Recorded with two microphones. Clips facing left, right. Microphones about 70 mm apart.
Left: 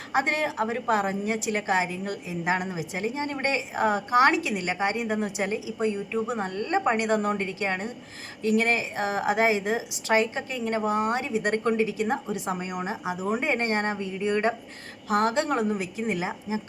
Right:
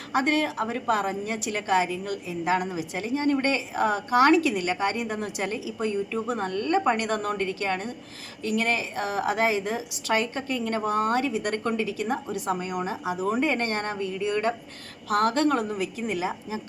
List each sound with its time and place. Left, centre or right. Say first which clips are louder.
0.1 s a woman's voice: right 1 dB; left